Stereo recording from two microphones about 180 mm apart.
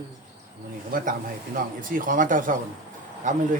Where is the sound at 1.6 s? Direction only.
50° right (ahead or behind).